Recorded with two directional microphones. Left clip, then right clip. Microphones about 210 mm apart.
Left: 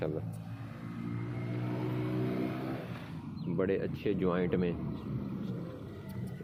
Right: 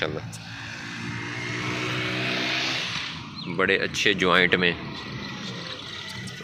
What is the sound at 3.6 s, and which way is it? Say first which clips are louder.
Speech: right 11 dB; 15° right (ahead or behind).